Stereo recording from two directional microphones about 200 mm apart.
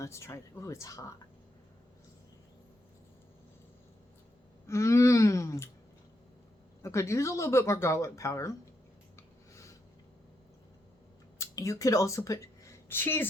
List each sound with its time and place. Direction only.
0.0 s speech: 15° left (ahead or behind)
4.6 s speech: 15° left (ahead or behind)
6.8 s speech: 15° left (ahead or behind)
9.1 s a sound: 15° left (ahead or behind)
11.3 s speech: 15° left (ahead or behind)